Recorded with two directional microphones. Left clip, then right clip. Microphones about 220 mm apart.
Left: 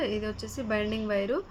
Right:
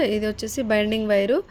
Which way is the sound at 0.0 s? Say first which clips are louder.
Right 8 dB; 40° right (ahead or behind).